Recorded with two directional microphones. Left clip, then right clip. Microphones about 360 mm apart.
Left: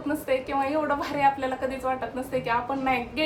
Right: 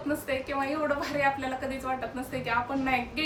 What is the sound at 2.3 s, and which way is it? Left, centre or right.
Speech, centre.